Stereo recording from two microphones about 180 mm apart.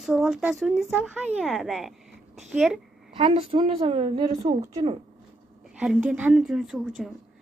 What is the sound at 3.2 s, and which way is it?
A woman's voice, 35° right (ahead or behind).